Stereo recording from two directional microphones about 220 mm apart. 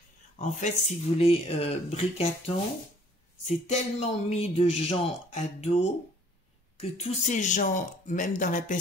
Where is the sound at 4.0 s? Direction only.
25° left (ahead or behind).